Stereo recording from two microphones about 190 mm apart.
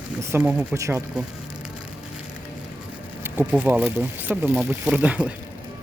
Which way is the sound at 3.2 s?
10° right (ahead or behind).